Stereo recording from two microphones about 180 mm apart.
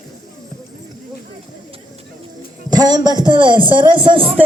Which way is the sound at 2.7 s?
20° right (ahead or behind).